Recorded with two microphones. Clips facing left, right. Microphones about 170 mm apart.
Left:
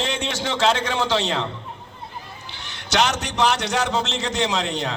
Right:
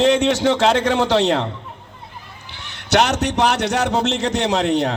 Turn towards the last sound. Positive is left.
turn(degrees=-55)  # may be behind; listen again after turning